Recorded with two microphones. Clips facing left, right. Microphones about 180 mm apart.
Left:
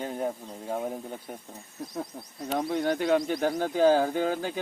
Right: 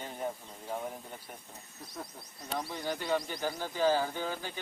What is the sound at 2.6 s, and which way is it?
Speech, 55° left (ahead or behind).